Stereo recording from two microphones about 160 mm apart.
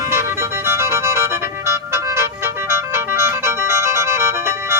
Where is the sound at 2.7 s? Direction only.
15° right (ahead or behind).